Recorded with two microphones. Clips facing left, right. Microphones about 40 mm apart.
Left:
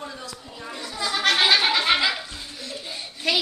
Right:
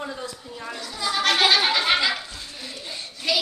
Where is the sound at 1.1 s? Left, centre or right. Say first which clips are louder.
Even; centre.